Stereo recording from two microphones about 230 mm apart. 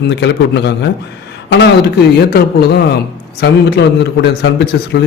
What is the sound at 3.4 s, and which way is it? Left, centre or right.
Speech, left.